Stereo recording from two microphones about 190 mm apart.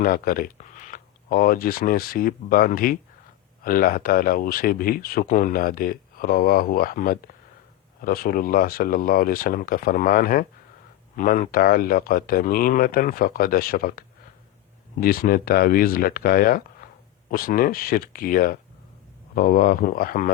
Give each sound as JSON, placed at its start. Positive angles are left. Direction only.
{"t": 0.0, "sound": "speech", "side_deg": 50}
{"t": 15.0, "sound": "speech", "side_deg": 50}